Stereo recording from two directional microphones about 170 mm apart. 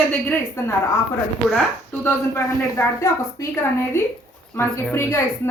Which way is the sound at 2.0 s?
15° left (ahead or behind).